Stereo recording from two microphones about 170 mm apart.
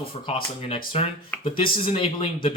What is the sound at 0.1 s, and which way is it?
Speech, 30° left (ahead or behind).